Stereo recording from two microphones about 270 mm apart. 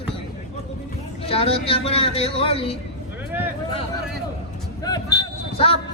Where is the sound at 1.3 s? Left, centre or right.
Left.